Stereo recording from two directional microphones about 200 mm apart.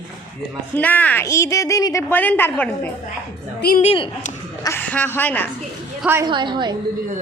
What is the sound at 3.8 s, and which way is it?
Speech, 30° left (ahead or behind).